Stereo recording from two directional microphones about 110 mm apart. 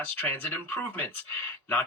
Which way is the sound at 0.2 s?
20° left (ahead or behind).